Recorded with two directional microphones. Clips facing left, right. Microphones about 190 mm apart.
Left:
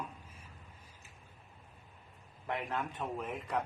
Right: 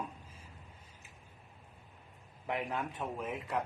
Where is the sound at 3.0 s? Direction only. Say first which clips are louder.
Even; 5° right (ahead or behind).